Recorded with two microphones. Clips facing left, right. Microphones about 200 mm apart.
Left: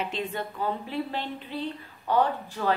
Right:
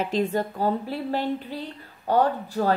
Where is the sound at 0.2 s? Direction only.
40° right (ahead or behind).